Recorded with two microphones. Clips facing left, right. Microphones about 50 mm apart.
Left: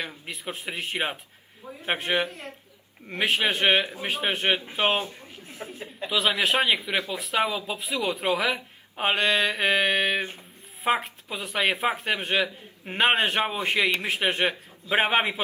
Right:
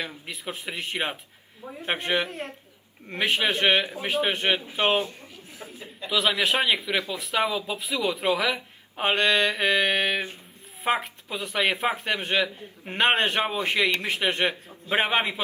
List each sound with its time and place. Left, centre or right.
0.0 s speech: centre
2.2 s speech: right
3.1 s speech: centre
5.3 s a sound: left
6.0 s speech: centre